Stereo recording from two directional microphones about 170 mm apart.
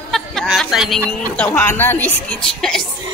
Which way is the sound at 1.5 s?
10° left (ahead or behind).